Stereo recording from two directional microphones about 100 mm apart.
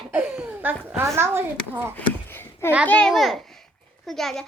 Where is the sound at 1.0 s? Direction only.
25° right (ahead or behind).